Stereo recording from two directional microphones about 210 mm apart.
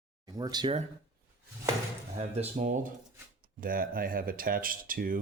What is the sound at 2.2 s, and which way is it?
Speech, 30° right (ahead or behind).